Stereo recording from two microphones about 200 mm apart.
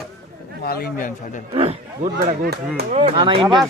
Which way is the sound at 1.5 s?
30° right (ahead or behind).